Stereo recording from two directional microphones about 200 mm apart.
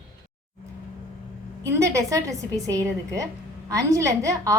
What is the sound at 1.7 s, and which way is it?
A woman's voice, 15° right (ahead or behind).